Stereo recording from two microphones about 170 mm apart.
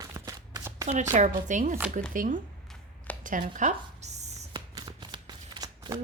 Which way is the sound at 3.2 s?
50° right (ahead or behind).